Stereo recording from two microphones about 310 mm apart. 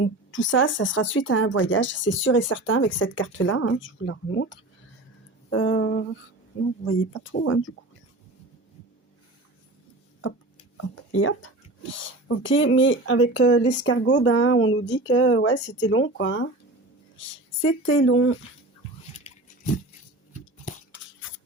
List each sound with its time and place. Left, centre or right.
0.0 s speech: left
10.8 s speech: left